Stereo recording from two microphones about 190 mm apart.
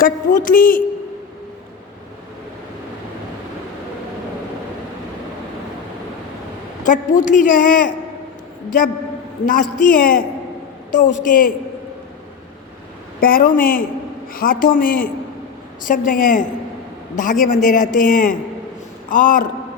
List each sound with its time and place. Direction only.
0.0 s a man's voice: 45° left (ahead or behind)
6.8 s a man's voice: 40° left (ahead or behind)
9.5 s a man's voice: 45° left (ahead or behind)
13.1 s a man's voice: 50° left (ahead or behind)